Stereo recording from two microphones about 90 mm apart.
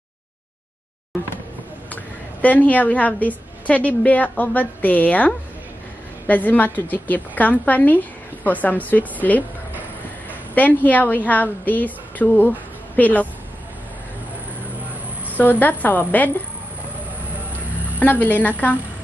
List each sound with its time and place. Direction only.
2.4 s a woman's voice: 15° left (ahead or behind)
10.5 s a woman's voice: 20° left (ahead or behind)
15.3 s a woman's voice: 20° left (ahead or behind)
17.9 s a woman's voice: 20° left (ahead or behind)